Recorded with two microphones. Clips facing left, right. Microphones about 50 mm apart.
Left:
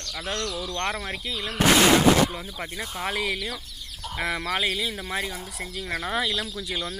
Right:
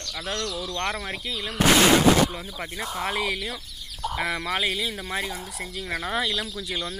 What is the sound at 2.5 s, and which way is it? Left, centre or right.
Speech, centre.